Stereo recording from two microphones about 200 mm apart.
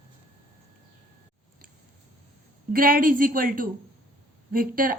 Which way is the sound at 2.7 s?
45° right (ahead or behind).